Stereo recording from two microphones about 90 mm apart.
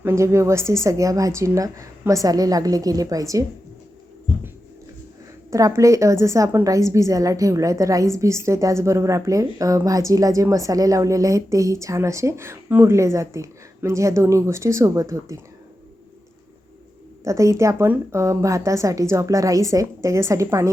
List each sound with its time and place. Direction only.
0.0 s a woman's voice: 30° right (ahead or behind)
5.5 s a woman's voice: 35° right (ahead or behind)
17.2 s a woman's voice: 35° right (ahead or behind)